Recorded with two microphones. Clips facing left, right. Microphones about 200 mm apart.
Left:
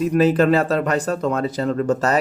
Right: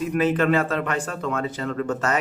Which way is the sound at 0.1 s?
35° left (ahead or behind).